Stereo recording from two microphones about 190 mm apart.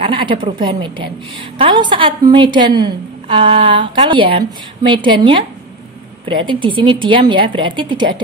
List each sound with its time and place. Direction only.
0.0 s a woman's voice: 25° right (ahead or behind)